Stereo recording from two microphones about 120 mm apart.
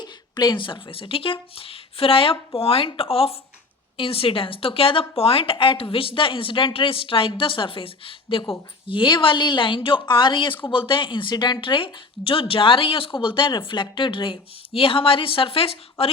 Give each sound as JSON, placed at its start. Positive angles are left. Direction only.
{"t": 0.0, "sound": "a woman's voice", "side_deg": 40}